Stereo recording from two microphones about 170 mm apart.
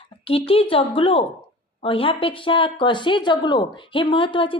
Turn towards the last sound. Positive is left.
turn(degrees=30)  # may be behind; listen again after turning